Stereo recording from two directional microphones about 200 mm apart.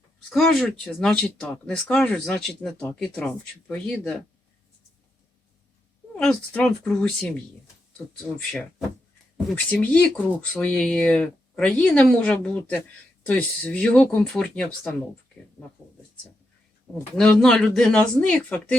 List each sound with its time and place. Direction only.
0.3 s speech: centre (ahead or behind)
6.1 s speech: 5° left (ahead or behind)
9.6 s speech: 5° left (ahead or behind)
17.2 s speech: 5° left (ahead or behind)